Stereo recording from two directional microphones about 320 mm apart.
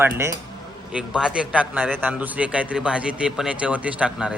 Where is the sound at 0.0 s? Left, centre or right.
Centre.